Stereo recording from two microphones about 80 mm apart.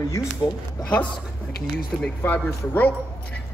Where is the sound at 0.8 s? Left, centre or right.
Centre.